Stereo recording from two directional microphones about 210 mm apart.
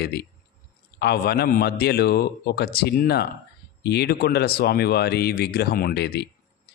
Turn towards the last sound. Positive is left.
turn(degrees=50)  # may be behind; listen again after turning